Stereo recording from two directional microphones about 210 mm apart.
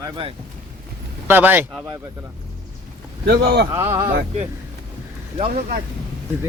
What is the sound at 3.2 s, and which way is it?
Speech, 50° right (ahead or behind).